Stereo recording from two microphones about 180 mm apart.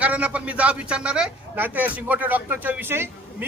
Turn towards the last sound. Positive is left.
turn(degrees=-10)  # may be behind; listen again after turning